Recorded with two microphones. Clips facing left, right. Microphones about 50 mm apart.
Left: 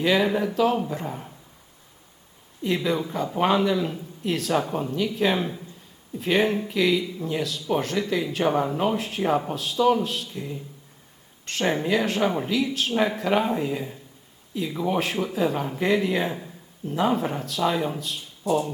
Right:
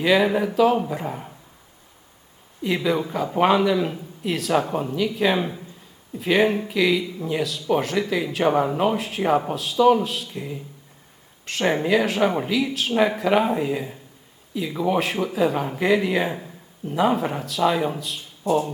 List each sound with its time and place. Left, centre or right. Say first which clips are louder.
0.0 s speech: right 3 dB; centre
2.6 s speech: right 2 dB; centre
4.5 s speech: right 4 dB; centre
4.9 s speech: right 1 dB; centre
8.6 s speech: right 3 dB; centre
9.0 s a man's voice: right 3 dB; centre
18.4 s speech: right 2 dB; right